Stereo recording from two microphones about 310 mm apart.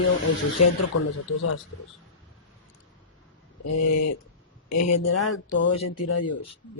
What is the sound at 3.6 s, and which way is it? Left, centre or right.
Speech, left.